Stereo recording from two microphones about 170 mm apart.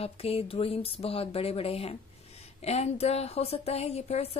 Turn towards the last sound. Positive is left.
turn(degrees=35)  # may be behind; listen again after turning